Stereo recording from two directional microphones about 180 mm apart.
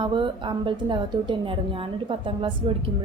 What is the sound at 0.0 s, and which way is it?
A woman's voice, 25° right (ahead or behind).